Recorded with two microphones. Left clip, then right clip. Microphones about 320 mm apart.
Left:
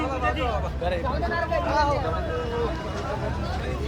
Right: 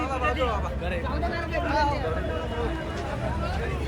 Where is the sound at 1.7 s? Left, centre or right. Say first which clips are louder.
Left 1 dB; centre.